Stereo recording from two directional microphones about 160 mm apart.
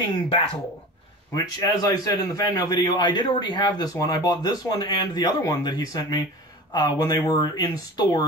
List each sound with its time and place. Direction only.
1.3 s a man's voice: 25° left (ahead or behind)